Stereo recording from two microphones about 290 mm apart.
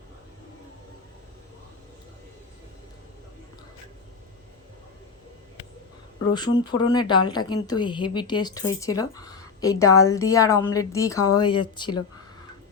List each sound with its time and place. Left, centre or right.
6.3 s a woman's voice: centre